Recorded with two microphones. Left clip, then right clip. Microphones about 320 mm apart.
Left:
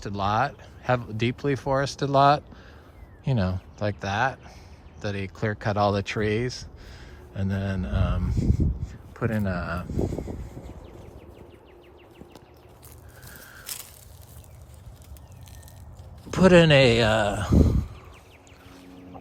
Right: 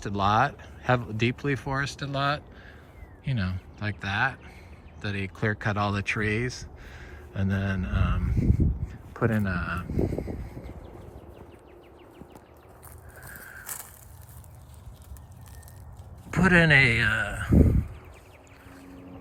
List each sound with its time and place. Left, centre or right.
0.0 s speech: centre
8.4 s speech: right
8.9 s speech: centre
13.2 s crushing: centre
16.3 s speech: centre